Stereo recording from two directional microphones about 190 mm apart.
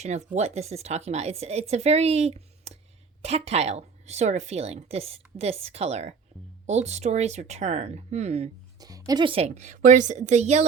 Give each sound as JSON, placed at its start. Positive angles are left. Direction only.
{"t": 0.0, "sound": "a woman's voice", "side_deg": -35}
{"t": 8.8, "sound": "a woman's voice", "side_deg": -20}